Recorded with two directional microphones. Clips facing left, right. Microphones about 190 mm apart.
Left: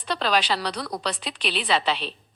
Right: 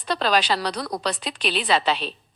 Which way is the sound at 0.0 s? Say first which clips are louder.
Right 2 dB; 40° right (ahead or behind).